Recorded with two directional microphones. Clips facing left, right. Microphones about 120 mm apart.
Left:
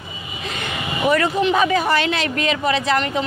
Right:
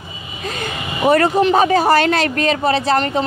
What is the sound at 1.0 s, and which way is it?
Speech, 40° right (ahead or behind).